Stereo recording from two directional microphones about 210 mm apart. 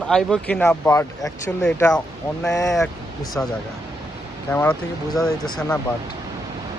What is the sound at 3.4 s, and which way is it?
Speech, 10° left (ahead or behind).